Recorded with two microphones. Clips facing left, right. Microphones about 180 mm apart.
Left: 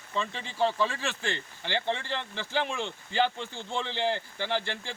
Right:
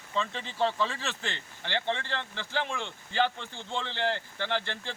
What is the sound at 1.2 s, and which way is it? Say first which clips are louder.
Speech: left 4 dB; 20° right (ahead or behind).